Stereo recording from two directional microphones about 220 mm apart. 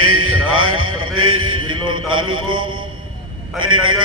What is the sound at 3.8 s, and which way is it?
Speech, 70° right (ahead or behind).